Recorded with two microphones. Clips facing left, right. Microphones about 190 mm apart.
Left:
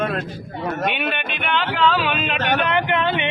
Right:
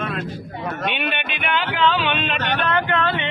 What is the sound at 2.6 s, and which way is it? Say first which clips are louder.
Speech: left 1 dB; 15° left (ahead or behind).